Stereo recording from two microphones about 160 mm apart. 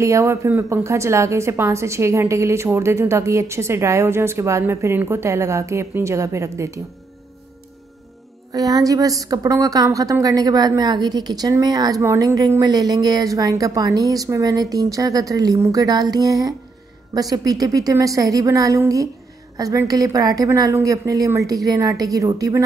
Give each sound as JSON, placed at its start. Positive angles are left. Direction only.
{"t": 0.0, "sound": "a woman's voice", "side_deg": -20}
{"t": 8.5, "sound": "a woman's voice", "side_deg": -25}